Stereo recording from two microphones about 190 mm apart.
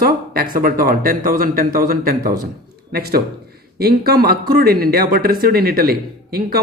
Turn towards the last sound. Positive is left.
turn(degrees=-55)  # may be behind; listen again after turning